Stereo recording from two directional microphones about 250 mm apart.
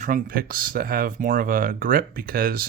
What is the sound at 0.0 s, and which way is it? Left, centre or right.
Speech, right.